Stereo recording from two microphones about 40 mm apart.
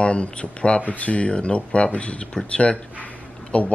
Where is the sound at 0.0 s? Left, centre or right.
Left.